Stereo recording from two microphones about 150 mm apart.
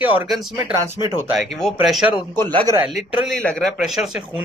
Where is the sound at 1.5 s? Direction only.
Centre (ahead or behind).